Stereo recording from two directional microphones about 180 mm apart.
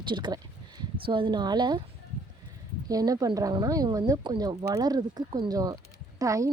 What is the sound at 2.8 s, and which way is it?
Speech, 20° right (ahead or behind).